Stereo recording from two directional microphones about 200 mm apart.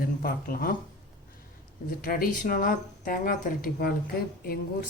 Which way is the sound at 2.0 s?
45° left (ahead or behind).